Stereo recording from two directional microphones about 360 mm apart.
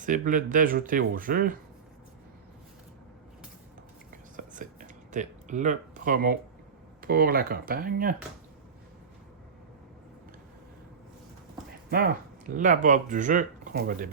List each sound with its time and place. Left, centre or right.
0.0 s speech: right
4.1 s whispering: right
7.0 s speech: right
11.9 s speech: right